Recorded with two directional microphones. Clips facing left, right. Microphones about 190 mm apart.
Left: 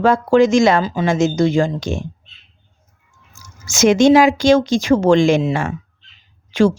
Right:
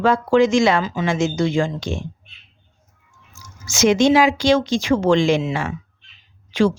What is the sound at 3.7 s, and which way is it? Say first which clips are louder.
A woman's voice: left 4 dB; 50° left (ahead or behind).